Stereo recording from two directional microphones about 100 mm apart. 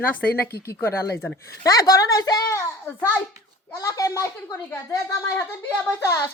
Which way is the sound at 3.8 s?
35° left (ahead or behind).